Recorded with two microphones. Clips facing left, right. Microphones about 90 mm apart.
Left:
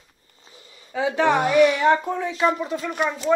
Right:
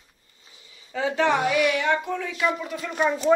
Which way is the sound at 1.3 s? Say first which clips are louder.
Left 5 dB; 45° left (ahead or behind).